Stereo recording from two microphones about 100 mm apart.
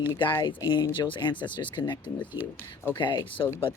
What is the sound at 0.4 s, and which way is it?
Speech, 50° left (ahead or behind).